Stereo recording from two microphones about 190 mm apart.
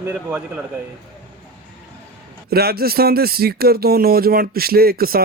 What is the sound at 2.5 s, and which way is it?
Speech, 55° right (ahead or behind).